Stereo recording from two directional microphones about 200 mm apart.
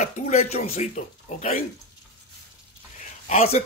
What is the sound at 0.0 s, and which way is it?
Speech, 35° left (ahead or behind).